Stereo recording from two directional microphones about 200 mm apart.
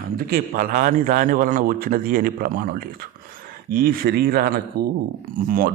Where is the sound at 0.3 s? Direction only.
45° right (ahead or behind).